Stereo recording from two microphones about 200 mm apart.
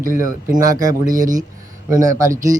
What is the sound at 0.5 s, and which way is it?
Speech, 40° right (ahead or behind).